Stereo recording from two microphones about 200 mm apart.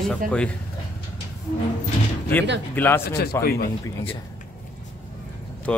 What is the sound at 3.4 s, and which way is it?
Speech, 50° left (ahead or behind).